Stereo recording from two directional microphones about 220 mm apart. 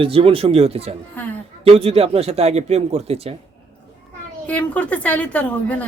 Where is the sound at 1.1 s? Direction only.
5° left (ahead or behind).